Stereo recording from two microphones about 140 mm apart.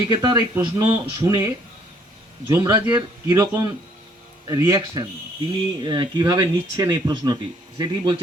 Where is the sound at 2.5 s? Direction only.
30° right (ahead or behind).